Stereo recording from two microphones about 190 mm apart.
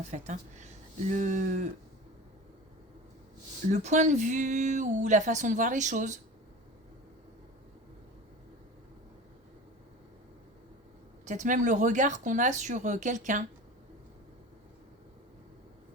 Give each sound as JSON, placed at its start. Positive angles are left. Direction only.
{"t": 0.0, "sound": "speech", "side_deg": -40}
{"t": 3.7, "sound": "speech", "side_deg": -35}
{"t": 11.3, "sound": "speech", "side_deg": -40}